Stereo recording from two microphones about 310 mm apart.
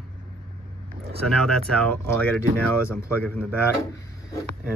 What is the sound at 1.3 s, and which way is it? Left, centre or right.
Speech, centre.